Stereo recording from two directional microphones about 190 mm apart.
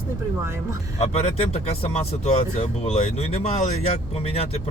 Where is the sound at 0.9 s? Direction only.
35° left (ahead or behind).